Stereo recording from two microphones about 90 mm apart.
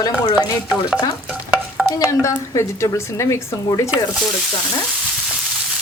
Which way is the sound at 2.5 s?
35° left (ahead or behind).